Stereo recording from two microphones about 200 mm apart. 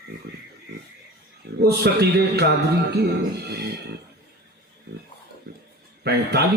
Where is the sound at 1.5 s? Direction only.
55° right (ahead or behind).